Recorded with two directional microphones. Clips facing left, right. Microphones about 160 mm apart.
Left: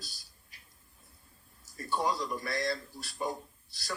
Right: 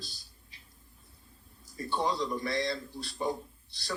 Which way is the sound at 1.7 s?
25° right (ahead or behind).